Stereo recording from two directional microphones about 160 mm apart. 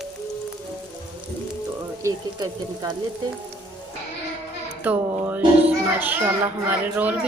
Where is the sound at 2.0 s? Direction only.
20° right (ahead or behind).